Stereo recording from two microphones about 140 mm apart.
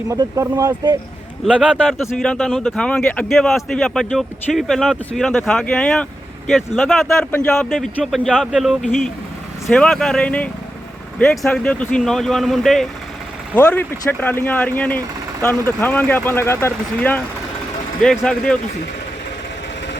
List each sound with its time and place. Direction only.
0.1 s speech: 20° right (ahead or behind)
1.5 s speech: 10° right (ahead or behind)
13.6 s speech: 10° left (ahead or behind)